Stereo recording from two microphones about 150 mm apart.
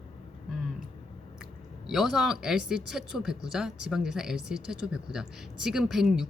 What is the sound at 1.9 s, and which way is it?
Speech, centre (ahead or behind).